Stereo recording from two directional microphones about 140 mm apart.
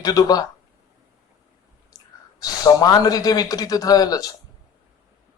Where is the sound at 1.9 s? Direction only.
25° left (ahead or behind).